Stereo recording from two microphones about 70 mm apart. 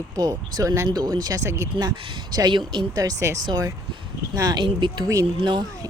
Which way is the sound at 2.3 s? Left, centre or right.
Right.